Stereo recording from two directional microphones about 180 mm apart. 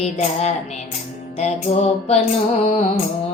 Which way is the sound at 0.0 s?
35° left (ahead or behind).